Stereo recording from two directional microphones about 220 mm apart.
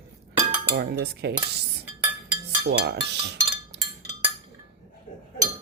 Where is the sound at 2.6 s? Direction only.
50° right (ahead or behind).